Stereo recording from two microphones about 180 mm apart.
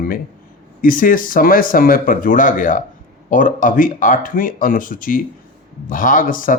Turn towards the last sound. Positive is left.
turn(degrees=50)  # may be behind; listen again after turning